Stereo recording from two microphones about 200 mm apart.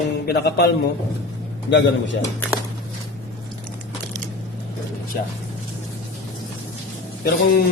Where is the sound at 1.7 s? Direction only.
65° left (ahead or behind).